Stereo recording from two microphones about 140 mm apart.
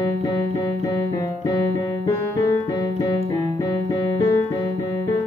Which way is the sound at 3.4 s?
25° left (ahead or behind).